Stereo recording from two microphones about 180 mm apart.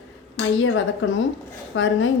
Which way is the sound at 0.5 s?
90° left.